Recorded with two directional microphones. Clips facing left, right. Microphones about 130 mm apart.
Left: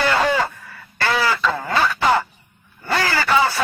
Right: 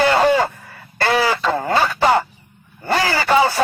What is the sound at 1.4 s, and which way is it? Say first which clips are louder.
Radio: right 3 dB; 40° right (ahead or behind).